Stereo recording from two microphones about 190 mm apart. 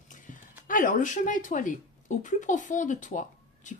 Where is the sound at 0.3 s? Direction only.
40° left (ahead or behind).